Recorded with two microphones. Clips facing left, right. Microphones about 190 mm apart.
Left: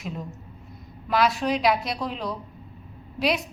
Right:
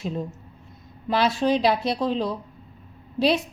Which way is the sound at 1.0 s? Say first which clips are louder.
Right 2 dB; 30° right (ahead or behind).